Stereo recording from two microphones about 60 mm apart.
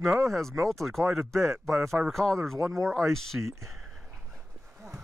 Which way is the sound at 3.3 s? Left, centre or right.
Right.